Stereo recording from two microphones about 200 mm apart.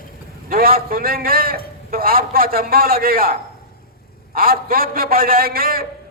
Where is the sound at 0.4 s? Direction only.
45° right (ahead or behind).